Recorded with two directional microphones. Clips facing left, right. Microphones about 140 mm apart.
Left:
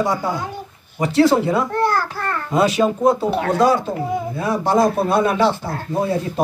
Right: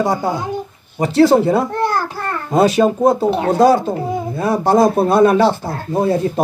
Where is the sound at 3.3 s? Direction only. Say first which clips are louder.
Right 3 dB; 25° right (ahead or behind).